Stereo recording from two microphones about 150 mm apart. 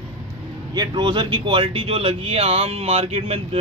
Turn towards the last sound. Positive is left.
turn(degrees=-40)  # may be behind; listen again after turning